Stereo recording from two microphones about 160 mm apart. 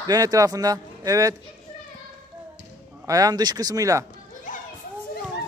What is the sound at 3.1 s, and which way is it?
Speech, 20° right (ahead or behind).